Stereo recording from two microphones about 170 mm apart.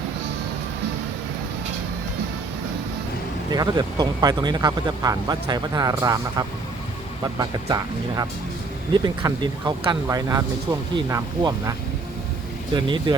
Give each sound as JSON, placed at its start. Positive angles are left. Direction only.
{"t": 3.5, "sound": "speech", "side_deg": -25}
{"t": 12.7, "sound": "speech", "side_deg": -25}